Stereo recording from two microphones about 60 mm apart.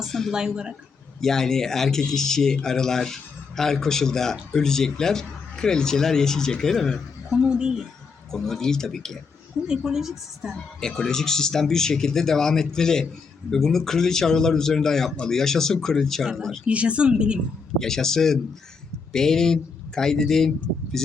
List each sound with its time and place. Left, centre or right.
0.0 s speech: centre
0.3 s a woman's voice: centre
1.2 s speech: centre
7.3 s a woman's voice: centre
8.3 s speech: centre
9.6 s a woman's voice: centre
10.8 s speech: centre
16.6 s a woman's voice: centre
17.7 s speech: centre